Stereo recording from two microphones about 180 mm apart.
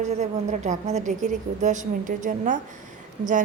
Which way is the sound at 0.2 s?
40° right (ahead or behind).